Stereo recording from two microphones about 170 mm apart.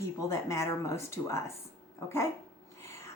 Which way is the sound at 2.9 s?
15° left (ahead or behind).